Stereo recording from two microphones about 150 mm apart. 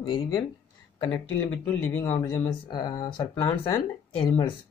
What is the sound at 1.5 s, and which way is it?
Speech, 10° left (ahead or behind).